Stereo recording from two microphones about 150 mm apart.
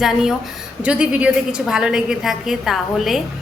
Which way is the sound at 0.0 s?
Centre (ahead or behind).